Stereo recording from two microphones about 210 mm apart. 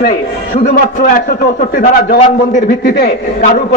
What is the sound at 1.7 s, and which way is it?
A man's voice, 40° left (ahead or behind).